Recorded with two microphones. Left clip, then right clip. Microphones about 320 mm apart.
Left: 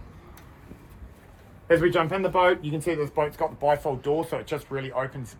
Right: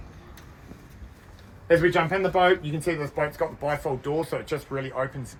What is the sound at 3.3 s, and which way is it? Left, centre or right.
Speech, left.